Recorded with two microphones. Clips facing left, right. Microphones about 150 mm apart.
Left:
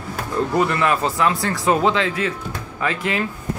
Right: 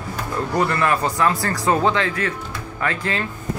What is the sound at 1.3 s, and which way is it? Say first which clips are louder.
Speech: left 1 dB; centre (ahead or behind).